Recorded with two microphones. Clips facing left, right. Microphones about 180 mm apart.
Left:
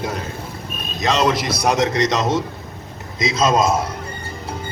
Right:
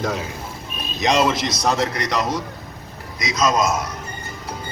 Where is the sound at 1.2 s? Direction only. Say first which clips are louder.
Left 2 dB; centre (ahead or behind).